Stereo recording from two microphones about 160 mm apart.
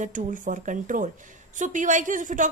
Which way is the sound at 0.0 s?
55° right (ahead or behind).